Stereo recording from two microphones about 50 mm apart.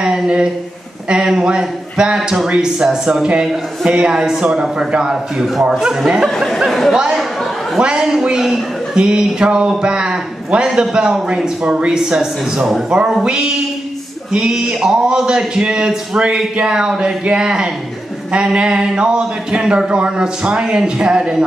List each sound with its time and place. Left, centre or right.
0.0 s a sound: centre
1.2 s a man's voice: centre
6.2 s speech: centre
7.2 s chatter: centre
7.8 s a man's voice: centre